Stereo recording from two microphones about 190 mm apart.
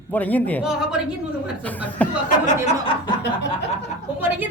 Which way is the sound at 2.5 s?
30° left (ahead or behind).